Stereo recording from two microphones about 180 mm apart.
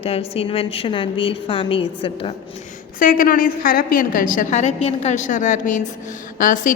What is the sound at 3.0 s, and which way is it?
A woman's voice, 50° left (ahead or behind).